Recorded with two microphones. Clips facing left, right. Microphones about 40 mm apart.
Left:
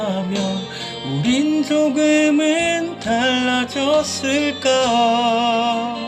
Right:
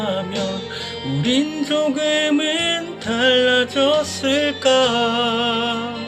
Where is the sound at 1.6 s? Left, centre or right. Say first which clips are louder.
Left 3 dB; right.